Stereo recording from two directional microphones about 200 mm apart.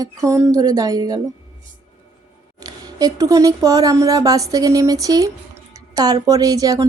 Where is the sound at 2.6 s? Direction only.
20° right (ahead or behind).